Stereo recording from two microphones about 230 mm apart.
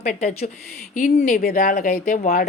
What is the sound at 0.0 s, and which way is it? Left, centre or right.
Speech, left.